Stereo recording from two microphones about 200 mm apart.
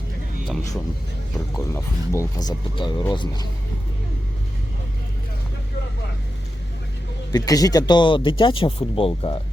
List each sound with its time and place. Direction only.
1.5 s speech: 15° left (ahead or behind)
7.3 s speech: 20° left (ahead or behind)